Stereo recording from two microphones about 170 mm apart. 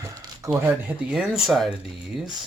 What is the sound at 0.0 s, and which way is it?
Speech, 20° right (ahead or behind).